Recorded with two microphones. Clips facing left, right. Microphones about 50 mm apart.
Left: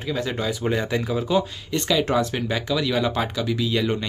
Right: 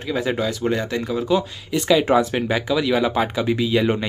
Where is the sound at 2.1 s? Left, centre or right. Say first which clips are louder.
Right 4 dB; centre.